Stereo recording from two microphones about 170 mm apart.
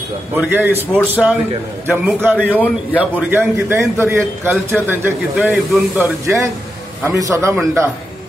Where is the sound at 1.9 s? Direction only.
10° right (ahead or behind).